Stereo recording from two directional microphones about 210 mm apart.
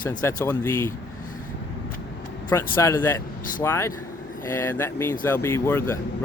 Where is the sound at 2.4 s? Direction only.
10° left (ahead or behind).